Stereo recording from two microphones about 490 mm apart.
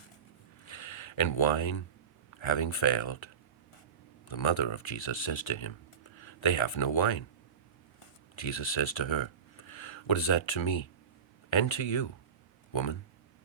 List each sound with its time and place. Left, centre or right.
0.6 s a sound: left
2.4 s speech: left
4.3 s speech: left
8.4 s speech: left